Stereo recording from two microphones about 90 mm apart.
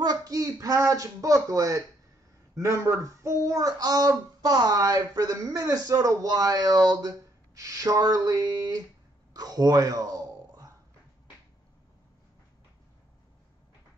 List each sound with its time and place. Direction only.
0.0 s speech: 45° right (ahead or behind)